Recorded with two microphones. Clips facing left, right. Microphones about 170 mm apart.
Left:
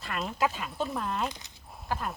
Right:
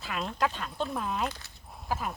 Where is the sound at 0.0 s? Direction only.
Centre (ahead or behind).